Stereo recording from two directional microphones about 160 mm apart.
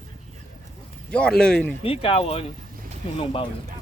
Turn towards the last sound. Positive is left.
turn(degrees=35)  # may be behind; listen again after turning